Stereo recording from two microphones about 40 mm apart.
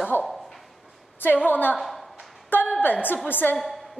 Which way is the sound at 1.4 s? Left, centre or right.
Left.